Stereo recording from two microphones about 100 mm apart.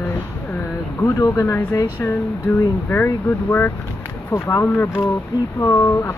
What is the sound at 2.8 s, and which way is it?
Speech, 20° left (ahead or behind).